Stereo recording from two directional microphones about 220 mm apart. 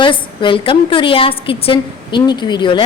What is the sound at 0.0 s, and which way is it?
A woman's voice, 20° left (ahead or behind).